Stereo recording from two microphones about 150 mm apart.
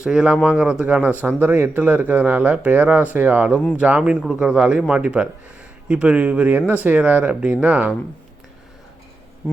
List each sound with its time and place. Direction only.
0.0 s speech: 5° right (ahead or behind)